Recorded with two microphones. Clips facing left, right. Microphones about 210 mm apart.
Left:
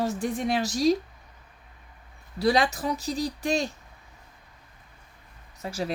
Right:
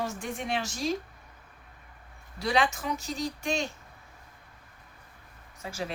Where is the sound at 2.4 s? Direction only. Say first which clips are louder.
Left 4 dB; 35° left (ahead or behind).